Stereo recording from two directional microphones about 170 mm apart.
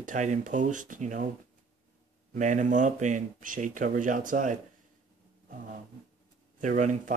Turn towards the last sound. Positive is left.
turn(degrees=-50)  # may be behind; listen again after turning